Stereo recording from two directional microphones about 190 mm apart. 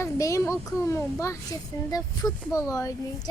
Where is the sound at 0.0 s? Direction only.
15° left (ahead or behind).